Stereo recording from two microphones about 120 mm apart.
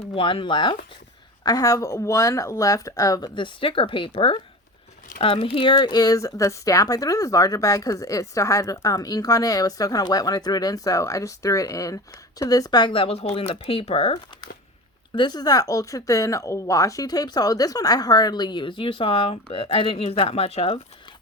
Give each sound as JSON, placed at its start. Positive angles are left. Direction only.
{"t": 0.0, "sound": "speech", "side_deg": 50}
{"t": 1.5, "sound": "speech", "side_deg": 30}
{"t": 15.1, "sound": "speech", "side_deg": 35}